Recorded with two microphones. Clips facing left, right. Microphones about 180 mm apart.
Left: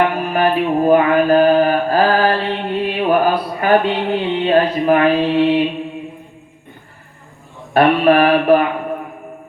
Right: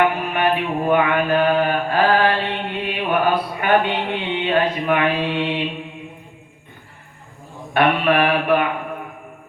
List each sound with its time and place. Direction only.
0.2 s mantra: 35° left (ahead or behind)
7.7 s mantra: 35° left (ahead or behind)